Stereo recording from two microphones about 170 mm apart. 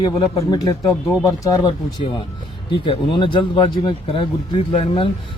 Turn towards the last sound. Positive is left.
turn(degrees=30)  # may be behind; listen again after turning